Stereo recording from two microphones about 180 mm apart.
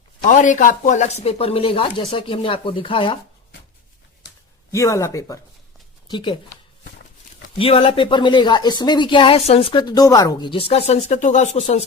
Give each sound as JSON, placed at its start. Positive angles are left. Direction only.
{"t": 0.3, "sound": "speech", "side_deg": 45}
{"t": 4.7, "sound": "speech", "side_deg": 15}
{"t": 7.6, "sound": "speech", "side_deg": 30}